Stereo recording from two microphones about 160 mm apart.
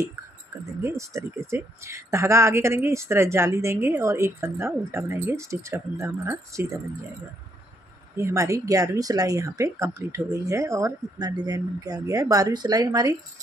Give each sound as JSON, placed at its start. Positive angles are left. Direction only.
{"t": 0.7, "sound": "speech", "side_deg": -20}
{"t": 8.2, "sound": "speech", "side_deg": -20}